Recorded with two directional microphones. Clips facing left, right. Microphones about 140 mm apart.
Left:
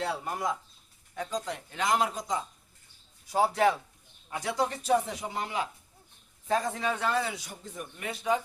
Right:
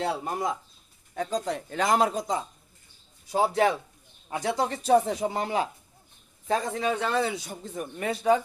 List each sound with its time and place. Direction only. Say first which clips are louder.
0.0 s speech: right 3 dB; 25° right (ahead or behind)
1.1 s speech: right 5 dB; 35° right (ahead or behind)
6.5 s speech: right 2 dB; 20° right (ahead or behind)